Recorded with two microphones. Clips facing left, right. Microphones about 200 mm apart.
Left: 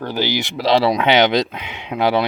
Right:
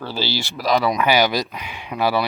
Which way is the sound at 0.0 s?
15° left (ahead or behind).